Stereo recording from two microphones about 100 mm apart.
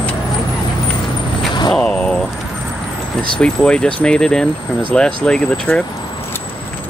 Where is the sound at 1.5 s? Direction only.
50° left (ahead or behind).